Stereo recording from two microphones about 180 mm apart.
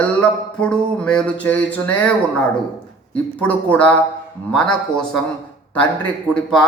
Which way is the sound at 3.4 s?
5° left (ahead or behind).